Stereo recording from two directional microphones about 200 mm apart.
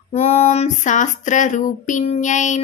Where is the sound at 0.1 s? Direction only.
30° left (ahead or behind).